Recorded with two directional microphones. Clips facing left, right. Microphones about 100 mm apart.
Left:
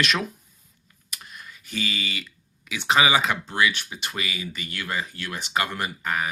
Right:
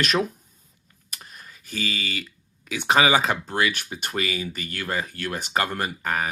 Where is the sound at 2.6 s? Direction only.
45° right (ahead or behind).